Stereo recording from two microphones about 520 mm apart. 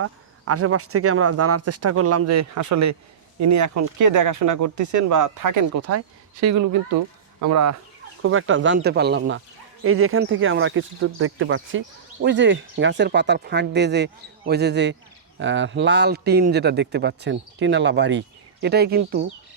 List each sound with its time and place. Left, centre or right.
0.0 s speech: right